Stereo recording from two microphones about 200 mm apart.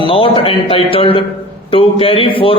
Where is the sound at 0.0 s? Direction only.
25° left (ahead or behind).